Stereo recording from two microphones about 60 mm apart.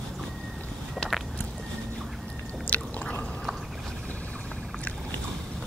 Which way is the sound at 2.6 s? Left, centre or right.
Left.